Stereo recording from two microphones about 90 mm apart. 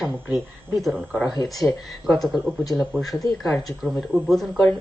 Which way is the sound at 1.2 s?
45° left (ahead or behind).